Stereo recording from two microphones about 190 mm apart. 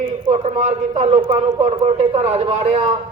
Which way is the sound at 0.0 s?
25° right (ahead or behind).